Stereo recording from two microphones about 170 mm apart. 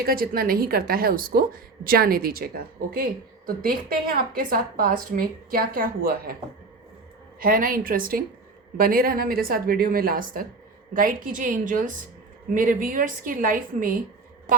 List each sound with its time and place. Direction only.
0.0 s a woman's voice: 60° right (ahead or behind)
7.3 s a woman's voice: 55° right (ahead or behind)